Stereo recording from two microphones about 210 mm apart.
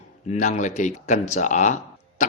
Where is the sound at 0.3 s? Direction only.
35° left (ahead or behind).